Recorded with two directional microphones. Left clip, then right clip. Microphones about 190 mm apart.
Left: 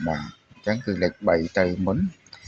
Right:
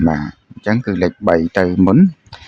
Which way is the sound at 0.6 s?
35° right (ahead or behind).